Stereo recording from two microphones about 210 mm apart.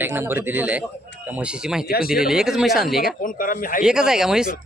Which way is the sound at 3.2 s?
40° left (ahead or behind).